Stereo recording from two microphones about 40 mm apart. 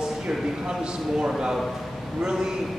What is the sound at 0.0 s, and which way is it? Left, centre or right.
A man's voice, centre.